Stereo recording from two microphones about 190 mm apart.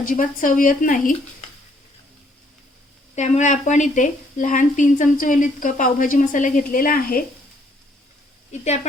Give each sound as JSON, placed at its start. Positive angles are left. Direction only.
{"t": 0.0, "sound": "a woman's voice", "side_deg": 45}
{"t": 3.2, "sound": "a woman's voice", "side_deg": 40}
{"t": 8.6, "sound": "a woman's voice", "side_deg": 35}